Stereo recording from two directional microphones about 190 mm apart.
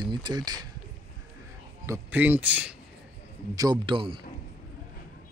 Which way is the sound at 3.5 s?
20° right (ahead or behind).